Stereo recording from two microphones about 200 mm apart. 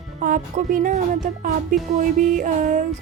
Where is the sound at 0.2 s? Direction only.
40° right (ahead or behind).